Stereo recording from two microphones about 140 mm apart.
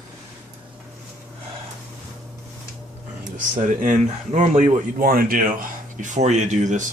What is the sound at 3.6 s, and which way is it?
Speech, 60° right (ahead or behind).